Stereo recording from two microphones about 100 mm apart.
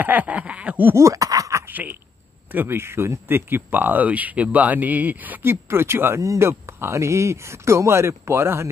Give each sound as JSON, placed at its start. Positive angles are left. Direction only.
{"t": 0.0, "sound": "snicker", "side_deg": -15}
{"t": 0.9, "sound": "a sound", "side_deg": -35}
{"t": 1.7, "sound": "speech", "side_deg": -20}